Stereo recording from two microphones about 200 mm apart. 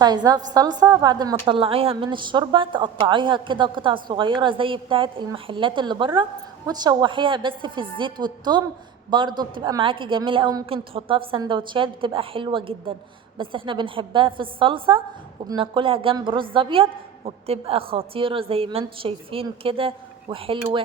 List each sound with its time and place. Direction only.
0.0 s a woman's voice: 20° right (ahead or behind)